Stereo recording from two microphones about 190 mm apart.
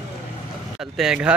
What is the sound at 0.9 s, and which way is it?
Speech, 5° right (ahead or behind).